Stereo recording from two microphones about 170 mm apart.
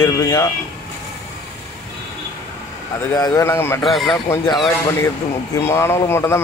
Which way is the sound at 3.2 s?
15° left (ahead or behind).